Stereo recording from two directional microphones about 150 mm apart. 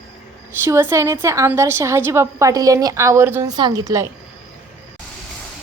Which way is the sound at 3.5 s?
25° right (ahead or behind).